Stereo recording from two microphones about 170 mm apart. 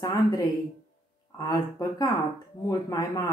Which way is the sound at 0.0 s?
25° left (ahead or behind).